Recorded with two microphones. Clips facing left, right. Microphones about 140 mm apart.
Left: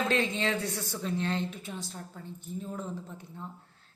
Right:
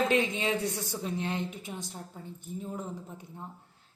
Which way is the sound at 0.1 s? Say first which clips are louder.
Right 1 dB; 15° right (ahead or behind).